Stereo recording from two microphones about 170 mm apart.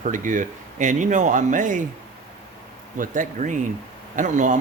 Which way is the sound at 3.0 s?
50° right (ahead or behind).